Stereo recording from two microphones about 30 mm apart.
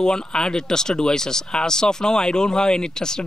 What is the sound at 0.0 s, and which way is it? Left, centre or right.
Speech, left.